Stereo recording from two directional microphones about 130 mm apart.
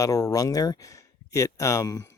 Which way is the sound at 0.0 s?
25° left (ahead or behind).